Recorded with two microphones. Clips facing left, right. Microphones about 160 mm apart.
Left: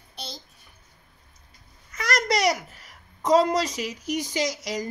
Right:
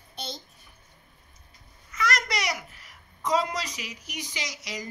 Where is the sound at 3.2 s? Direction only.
40° left (ahead or behind).